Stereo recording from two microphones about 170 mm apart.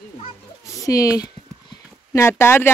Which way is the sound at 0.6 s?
20° left (ahead or behind).